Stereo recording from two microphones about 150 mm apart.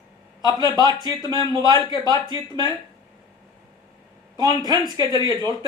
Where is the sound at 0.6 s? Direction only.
25° right (ahead or behind).